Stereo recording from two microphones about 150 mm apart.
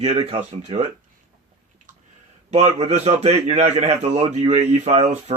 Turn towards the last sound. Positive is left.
turn(degrees=-45)  # may be behind; listen again after turning